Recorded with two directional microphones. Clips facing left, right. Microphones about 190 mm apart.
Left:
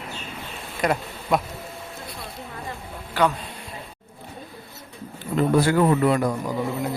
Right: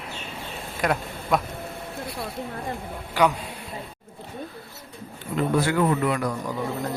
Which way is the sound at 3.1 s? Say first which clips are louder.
Even; 15° right (ahead or behind).